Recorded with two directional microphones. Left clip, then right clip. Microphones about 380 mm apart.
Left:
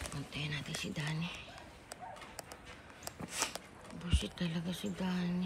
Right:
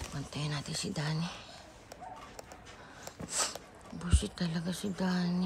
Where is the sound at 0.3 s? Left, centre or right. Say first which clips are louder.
Right 2 dB; centre.